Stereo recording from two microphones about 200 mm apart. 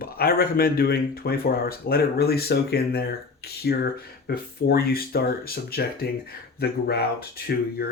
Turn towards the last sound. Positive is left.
turn(degrees=50)  # may be behind; listen again after turning